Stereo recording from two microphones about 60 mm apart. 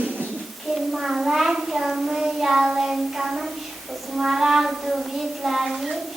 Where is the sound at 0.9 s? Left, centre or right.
Centre.